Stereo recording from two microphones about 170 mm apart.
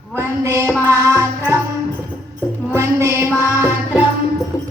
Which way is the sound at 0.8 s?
15° right (ahead or behind).